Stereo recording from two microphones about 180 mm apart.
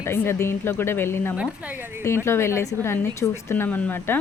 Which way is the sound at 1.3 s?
5° right (ahead or behind).